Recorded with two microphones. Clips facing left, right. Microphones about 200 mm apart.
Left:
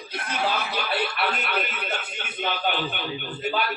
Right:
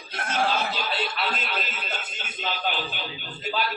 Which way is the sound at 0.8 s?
65° left (ahead or behind).